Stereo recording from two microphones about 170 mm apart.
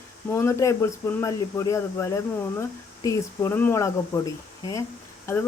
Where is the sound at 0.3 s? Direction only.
15° left (ahead or behind).